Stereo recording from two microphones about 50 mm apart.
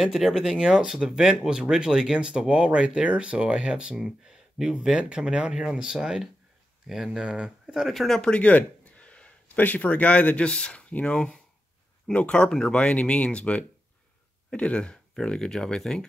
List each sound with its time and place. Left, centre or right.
0.0 s speech: centre
0.6 s speech: centre
7.9 s speech: centre
8.2 s a sound: left
9.6 s speech: left
11.1 s speech: centre